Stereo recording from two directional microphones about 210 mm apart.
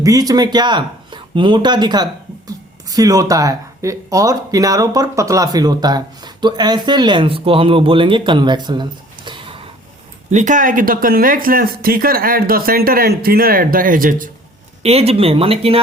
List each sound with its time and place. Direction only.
0.0 s speech: 15° right (ahead or behind)
10.3 s speech: 35° right (ahead or behind)
14.8 s speech: 30° right (ahead or behind)